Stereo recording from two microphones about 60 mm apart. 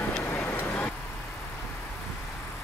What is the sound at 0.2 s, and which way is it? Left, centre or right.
Vehicle, left.